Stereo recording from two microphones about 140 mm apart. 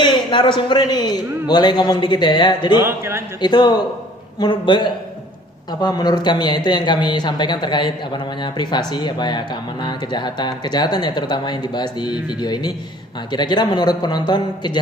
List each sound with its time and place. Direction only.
0.0 s speech: 35° left (ahead or behind)
2.7 s a man's voice: 20° right (ahead or behind)
3.4 s speech: 30° left (ahead or behind)